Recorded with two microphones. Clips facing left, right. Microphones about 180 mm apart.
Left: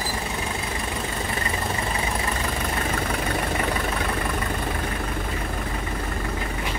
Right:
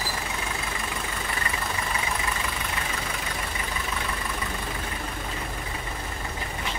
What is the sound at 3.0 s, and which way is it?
Vehicle, 65° left (ahead or behind).